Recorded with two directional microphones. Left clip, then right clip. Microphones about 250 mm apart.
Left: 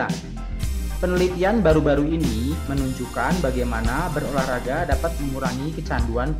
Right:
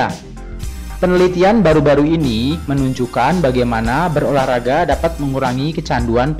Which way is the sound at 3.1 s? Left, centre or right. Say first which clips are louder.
Right 9 dB; centre.